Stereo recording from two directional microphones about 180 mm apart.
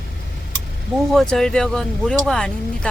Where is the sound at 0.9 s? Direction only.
Centre (ahead or behind).